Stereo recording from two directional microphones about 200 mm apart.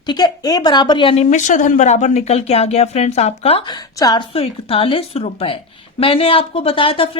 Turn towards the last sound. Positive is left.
turn(degrees=25)  # may be behind; listen again after turning